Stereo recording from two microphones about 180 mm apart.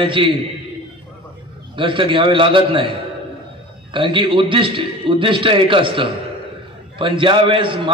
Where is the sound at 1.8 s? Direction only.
30° right (ahead or behind).